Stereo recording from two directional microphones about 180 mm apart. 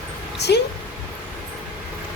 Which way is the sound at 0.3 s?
70° left (ahead or behind).